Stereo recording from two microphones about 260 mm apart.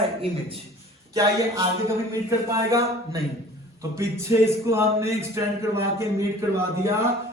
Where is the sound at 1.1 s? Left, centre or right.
Centre.